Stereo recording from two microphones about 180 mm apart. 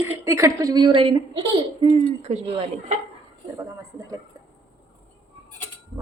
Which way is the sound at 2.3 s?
40° right (ahead or behind).